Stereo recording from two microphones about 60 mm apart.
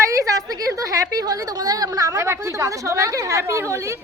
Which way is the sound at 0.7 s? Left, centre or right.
Right.